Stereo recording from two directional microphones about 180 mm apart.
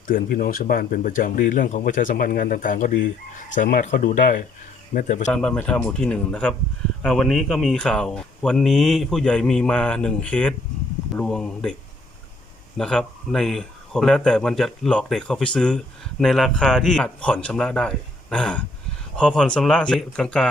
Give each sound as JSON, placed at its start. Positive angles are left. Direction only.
{"t": 0.1, "sound": "speech", "side_deg": 55}
{"t": 5.3, "sound": "speech", "side_deg": 5}